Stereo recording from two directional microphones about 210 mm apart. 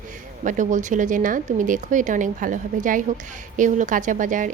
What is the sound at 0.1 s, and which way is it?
A woman's voice, 40° right (ahead or behind).